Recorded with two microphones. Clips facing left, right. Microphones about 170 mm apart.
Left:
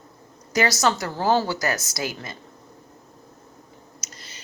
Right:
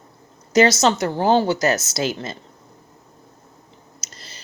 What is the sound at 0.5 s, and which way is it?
A woman's voice, 25° right (ahead or behind).